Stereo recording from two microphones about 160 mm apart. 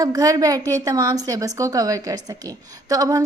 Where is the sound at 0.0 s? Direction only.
20° right (ahead or behind).